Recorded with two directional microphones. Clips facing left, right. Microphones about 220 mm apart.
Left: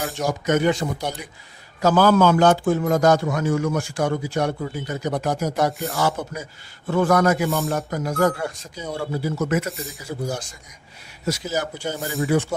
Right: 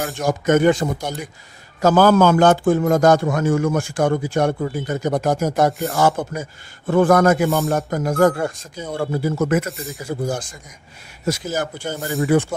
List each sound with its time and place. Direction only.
0.3 s a man's voice: 50° right (ahead or behind)
9.6 s speech: centre (ahead or behind)
10.0 s a man's voice: 50° right (ahead or behind)
11.9 s speech: centre (ahead or behind)